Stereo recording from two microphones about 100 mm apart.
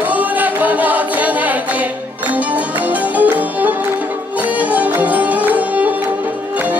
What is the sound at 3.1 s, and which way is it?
Music, 15° right (ahead or behind).